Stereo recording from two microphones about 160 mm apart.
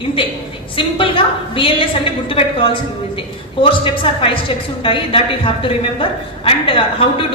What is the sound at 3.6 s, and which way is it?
A man's voice, 35° left (ahead or behind).